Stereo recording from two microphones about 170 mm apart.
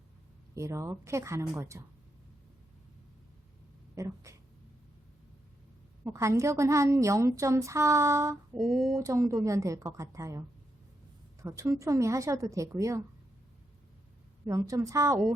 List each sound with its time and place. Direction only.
0.5 s a woman's voice: 15° right (ahead or behind)
3.9 s a woman's voice: 20° right (ahead or behind)
6.1 s a woman's voice: 20° right (ahead or behind)
8.5 s speech: centre (ahead or behind)
9.0 s a woman's voice: 20° right (ahead or behind)
11.4 s a woman's voice: 15° right (ahead or behind)
14.4 s a woman's voice: 20° right (ahead or behind)